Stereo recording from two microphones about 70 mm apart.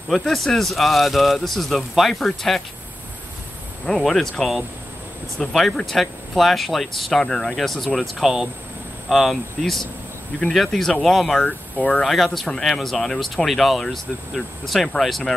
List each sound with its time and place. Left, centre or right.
0.1 s speech: centre
3.8 s speech: centre
11.4 s speech: centre
12.0 s speech: centre